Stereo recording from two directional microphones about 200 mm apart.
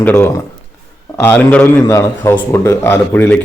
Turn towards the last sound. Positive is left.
turn(degrees=10)  # may be behind; listen again after turning